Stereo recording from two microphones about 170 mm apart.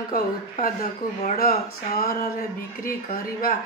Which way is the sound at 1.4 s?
60° left (ahead or behind).